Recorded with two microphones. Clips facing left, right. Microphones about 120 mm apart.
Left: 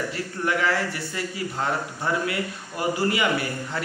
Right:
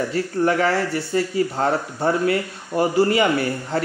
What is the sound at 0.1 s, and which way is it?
Speech, 35° right (ahead or behind).